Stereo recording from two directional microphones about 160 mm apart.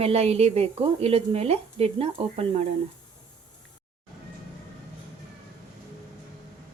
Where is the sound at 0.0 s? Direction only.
40° right (ahead or behind).